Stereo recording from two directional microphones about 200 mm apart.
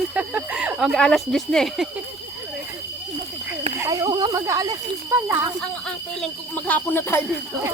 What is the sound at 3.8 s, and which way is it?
Speech, 15° right (ahead or behind).